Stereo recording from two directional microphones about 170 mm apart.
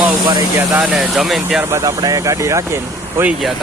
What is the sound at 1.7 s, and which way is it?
Speech, 20° right (ahead or behind).